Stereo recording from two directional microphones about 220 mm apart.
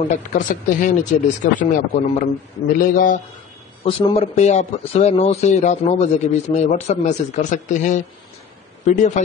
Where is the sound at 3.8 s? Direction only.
25° left (ahead or behind).